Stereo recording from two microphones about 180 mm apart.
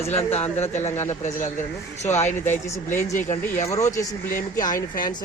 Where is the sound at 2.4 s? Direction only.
15° left (ahead or behind).